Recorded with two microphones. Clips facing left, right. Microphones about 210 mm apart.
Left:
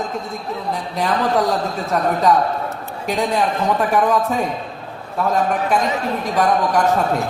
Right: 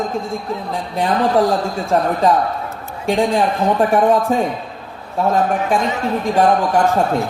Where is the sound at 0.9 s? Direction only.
30° right (ahead or behind).